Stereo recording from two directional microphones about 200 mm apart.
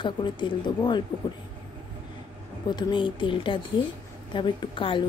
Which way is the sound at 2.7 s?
20° left (ahead or behind).